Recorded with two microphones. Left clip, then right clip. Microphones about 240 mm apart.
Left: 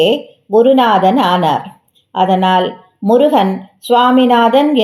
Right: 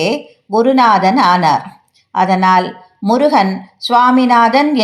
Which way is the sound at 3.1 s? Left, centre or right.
Right.